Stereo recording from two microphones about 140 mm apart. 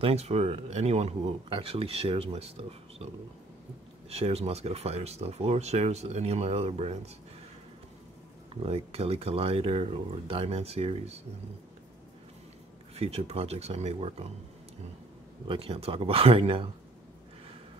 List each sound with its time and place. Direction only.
0.0 s speech: 50° right (ahead or behind)
4.1 s speech: 50° right (ahead or behind)
8.6 s speech: 45° right (ahead or behind)
12.9 s speech: 45° right (ahead or behind)
15.4 s speech: 40° right (ahead or behind)